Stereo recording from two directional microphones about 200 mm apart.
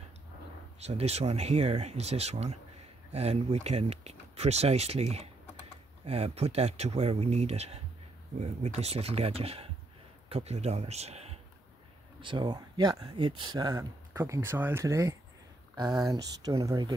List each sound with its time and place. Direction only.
0.7 s speech: 30° right (ahead or behind)